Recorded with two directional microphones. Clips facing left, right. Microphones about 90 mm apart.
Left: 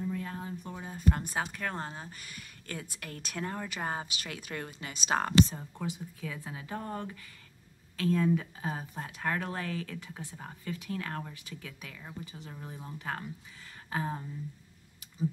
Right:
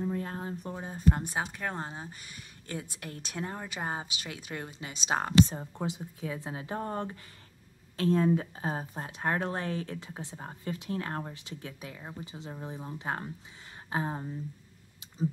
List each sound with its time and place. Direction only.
0.0 s a woman's voice: 35° right (ahead or behind); by 5.3 s 20° right (ahead or behind)
5.6 s a woman's voice: 30° right (ahead or behind)